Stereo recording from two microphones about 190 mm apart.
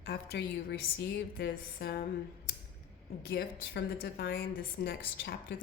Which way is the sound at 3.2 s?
55° left (ahead or behind).